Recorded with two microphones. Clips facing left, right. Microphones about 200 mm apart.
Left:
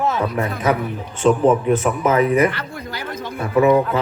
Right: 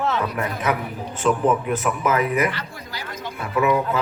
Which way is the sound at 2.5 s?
55° left (ahead or behind).